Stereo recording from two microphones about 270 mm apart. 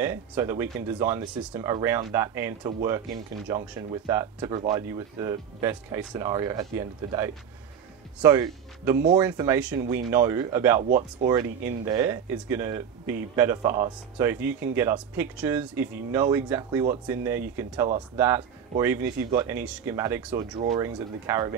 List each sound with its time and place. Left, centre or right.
0.0 s speech: centre
10.8 s speech: right
11.2 s speech: centre